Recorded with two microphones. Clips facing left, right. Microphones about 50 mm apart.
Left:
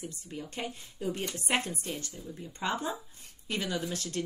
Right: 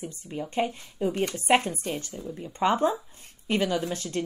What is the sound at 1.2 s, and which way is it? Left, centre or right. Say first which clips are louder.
A woman's voice: right 10 dB; right.